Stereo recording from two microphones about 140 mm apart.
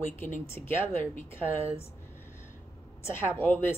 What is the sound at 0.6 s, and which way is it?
Speech, 50° right (ahead or behind).